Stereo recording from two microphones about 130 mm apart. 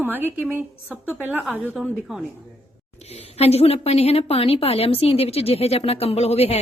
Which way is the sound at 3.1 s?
55° left (ahead or behind).